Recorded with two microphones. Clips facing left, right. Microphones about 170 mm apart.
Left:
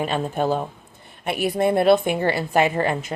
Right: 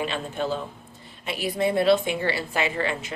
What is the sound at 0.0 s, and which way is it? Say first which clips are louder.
A woman's voice: left 5 dB; 45° left (ahead or behind).